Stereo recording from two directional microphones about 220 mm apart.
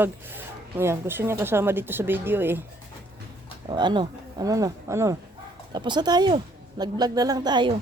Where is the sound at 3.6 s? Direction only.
20° right (ahead or behind).